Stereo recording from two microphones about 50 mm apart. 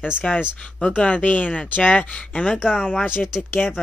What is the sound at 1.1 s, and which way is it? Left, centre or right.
Speech, left.